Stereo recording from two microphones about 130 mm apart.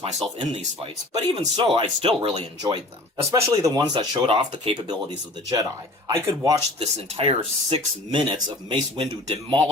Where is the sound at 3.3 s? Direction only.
30° right (ahead or behind).